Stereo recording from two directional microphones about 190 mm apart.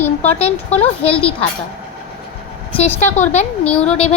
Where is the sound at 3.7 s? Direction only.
30° left (ahead or behind).